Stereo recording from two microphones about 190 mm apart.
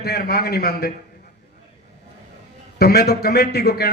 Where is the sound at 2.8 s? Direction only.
55° left (ahead or behind).